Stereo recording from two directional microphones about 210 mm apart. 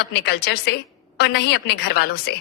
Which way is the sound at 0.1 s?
50° left (ahead or behind).